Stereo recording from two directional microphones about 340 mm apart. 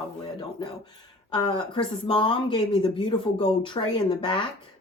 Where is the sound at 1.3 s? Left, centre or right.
Centre.